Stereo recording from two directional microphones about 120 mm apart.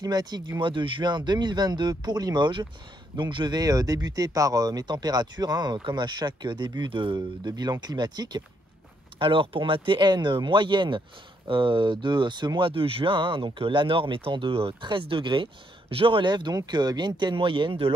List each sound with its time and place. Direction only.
0.0 s speech: 30° right (ahead or behind)
0.6 s speech: 45° right (ahead or behind)
9.2 s speech: 45° right (ahead or behind)